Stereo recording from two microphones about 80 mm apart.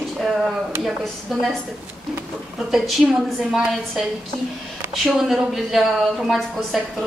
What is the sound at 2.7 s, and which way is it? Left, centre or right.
A woman's voice, centre.